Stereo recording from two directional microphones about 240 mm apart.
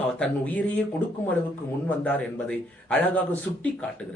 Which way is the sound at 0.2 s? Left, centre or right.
Centre.